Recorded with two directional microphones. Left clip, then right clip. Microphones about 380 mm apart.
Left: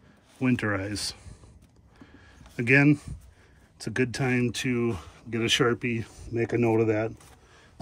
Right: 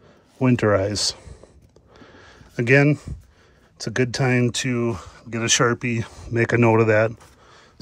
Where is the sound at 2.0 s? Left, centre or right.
Centre.